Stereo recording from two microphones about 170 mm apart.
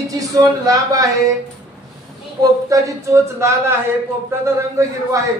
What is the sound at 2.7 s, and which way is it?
A man's voice, 20° right (ahead or behind).